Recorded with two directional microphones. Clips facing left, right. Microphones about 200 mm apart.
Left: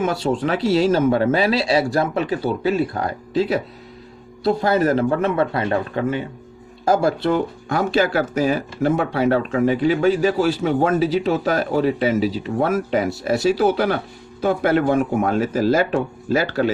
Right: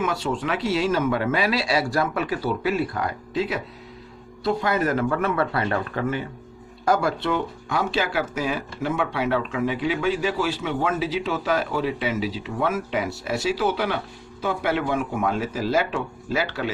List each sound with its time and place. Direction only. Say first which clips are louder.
0.0 s speech: left 5 dB; 35° left (ahead or behind)